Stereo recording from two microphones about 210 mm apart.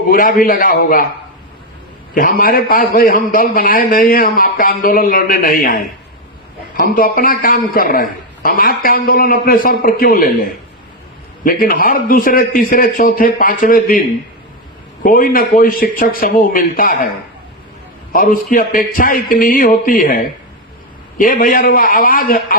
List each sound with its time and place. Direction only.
0.1 s a man's voice: 40° left (ahead or behind)
2.1 s a man's voice: 45° left (ahead or behind)
15.0 s a man's voice: 40° left (ahead or behind)
18.1 s a man's voice: 45° left (ahead or behind)